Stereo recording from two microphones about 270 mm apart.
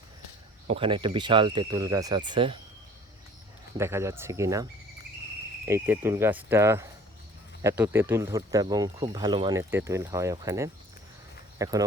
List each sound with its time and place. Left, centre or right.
0.7 s speech: centre
3.8 s speech: centre
5.6 s speech: centre